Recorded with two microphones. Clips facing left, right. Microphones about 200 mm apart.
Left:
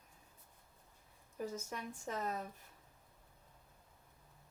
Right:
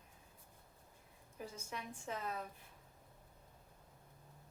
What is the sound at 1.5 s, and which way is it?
Speech, 40° left (ahead or behind).